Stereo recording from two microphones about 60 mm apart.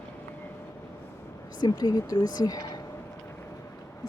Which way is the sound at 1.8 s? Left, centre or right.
Left.